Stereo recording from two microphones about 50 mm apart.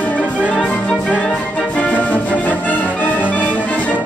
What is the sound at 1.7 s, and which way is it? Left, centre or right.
Music, left.